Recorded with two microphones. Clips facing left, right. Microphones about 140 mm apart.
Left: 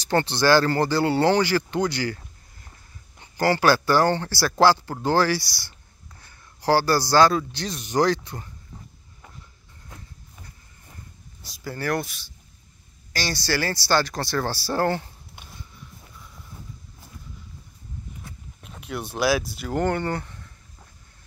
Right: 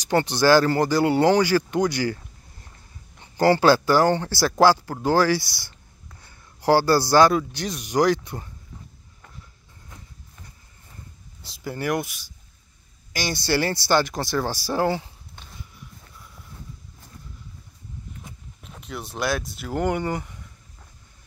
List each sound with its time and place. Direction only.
0.0 s a man's voice: 15° right (ahead or behind)
3.2 s a man's voice: 20° right (ahead or behind)
8.2 s speech: 20° right (ahead or behind)
11.4 s a man's voice: 20° right (ahead or behind)
18.6 s speech: 5° left (ahead or behind)
19.9 s speech: 10° right (ahead or behind)